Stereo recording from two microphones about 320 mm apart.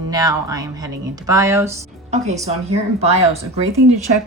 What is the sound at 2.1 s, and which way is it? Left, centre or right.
Speech, right.